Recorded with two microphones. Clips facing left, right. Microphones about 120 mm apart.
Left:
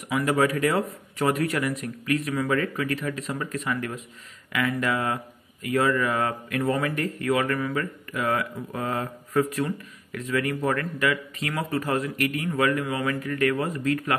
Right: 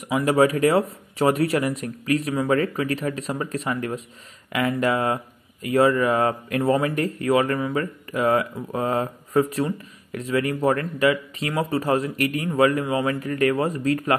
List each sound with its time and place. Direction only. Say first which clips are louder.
0.1 s speech: right 4 dB; 35° right (ahead or behind)